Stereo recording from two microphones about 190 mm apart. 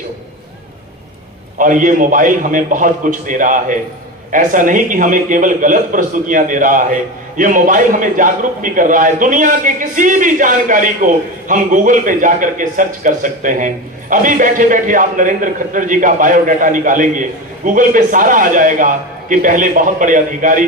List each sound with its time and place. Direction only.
1.5 s a man's voice: 45° right (ahead or behind)